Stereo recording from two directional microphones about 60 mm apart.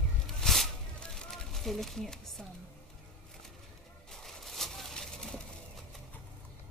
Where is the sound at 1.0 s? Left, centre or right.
Centre.